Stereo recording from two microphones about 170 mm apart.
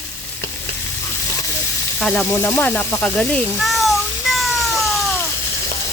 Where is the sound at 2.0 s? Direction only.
5° left (ahead or behind).